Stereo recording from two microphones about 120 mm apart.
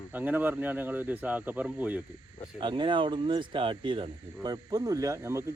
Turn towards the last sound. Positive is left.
turn(degrees=-25)  # may be behind; listen again after turning